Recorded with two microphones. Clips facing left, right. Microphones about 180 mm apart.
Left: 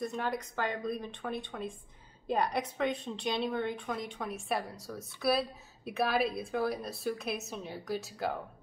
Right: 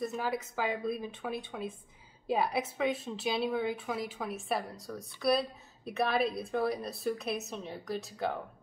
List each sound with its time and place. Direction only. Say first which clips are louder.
0.0 s a woman's voice: right 1 dB; 5° right (ahead or behind)